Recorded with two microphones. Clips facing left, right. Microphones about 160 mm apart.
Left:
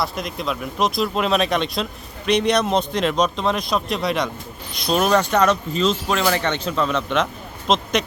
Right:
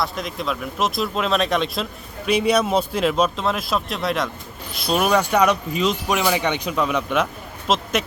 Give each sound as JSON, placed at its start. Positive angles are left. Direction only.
{"t": 0.0, "sound": "speech", "side_deg": 0}